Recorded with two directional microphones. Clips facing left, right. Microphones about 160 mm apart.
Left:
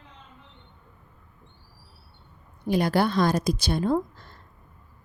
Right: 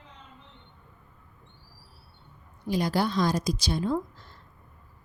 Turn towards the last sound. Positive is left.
turn(degrees=55)  # may be behind; listen again after turning